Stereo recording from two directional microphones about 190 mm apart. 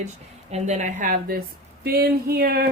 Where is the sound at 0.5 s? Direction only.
40° right (ahead or behind); by 2.6 s 55° right (ahead or behind).